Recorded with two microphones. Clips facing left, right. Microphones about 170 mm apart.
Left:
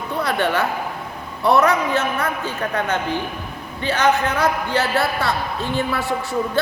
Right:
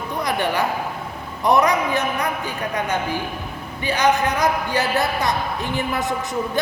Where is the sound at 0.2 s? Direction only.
15° right (ahead or behind).